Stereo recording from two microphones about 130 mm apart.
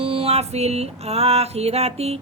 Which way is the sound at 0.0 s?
45° right (ahead or behind).